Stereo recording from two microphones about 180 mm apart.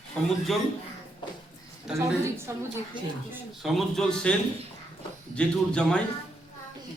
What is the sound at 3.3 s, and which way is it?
A man's voice, centre (ahead or behind).